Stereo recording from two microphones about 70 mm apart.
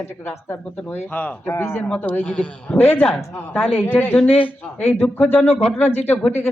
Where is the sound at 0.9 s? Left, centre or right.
Left.